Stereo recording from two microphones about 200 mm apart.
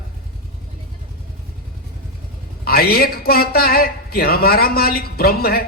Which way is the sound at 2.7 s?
50° left (ahead or behind).